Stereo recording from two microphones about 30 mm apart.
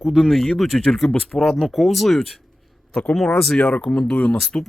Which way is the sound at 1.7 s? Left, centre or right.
Centre.